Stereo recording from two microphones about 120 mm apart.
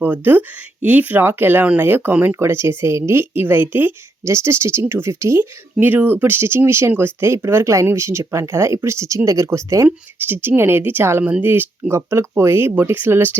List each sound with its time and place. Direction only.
0.0 s speech: 15° right (ahead or behind)